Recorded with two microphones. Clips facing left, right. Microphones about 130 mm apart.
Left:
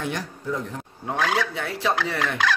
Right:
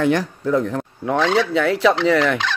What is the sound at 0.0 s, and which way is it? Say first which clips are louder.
Speech: right 11 dB; 75° right (ahead or behind).